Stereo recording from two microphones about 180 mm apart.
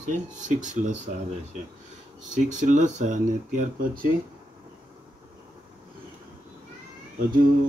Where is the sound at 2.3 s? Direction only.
45° right (ahead or behind).